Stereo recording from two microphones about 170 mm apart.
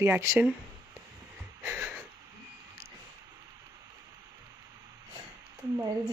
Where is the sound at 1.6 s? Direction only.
10° right (ahead or behind).